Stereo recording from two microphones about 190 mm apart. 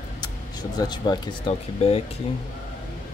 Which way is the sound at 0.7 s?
20° left (ahead or behind).